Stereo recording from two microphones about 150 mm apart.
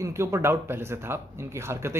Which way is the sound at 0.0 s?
20° right (ahead or behind).